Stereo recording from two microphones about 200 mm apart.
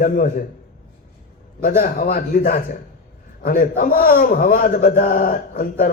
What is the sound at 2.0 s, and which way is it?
A man's voice, 50° left (ahead or behind).